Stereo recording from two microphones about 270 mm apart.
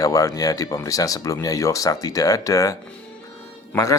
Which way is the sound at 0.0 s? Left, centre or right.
Centre.